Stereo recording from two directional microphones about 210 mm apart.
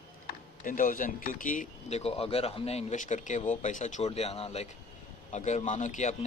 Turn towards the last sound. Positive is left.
turn(degrees=35)  # may be behind; listen again after turning